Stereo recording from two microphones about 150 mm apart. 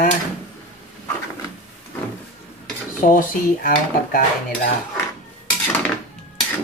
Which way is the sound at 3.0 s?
65° left (ahead or behind).